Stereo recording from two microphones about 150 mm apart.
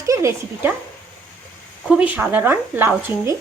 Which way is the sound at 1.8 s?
10° right (ahead or behind).